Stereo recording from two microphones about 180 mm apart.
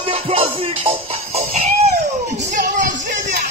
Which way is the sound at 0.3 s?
30° right (ahead or behind).